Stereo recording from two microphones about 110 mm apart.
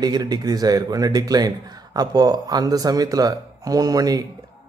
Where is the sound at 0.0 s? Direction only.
35° right (ahead or behind).